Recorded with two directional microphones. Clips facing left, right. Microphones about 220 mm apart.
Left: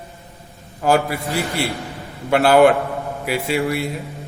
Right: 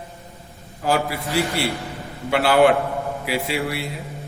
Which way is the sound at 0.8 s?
50° left (ahead or behind).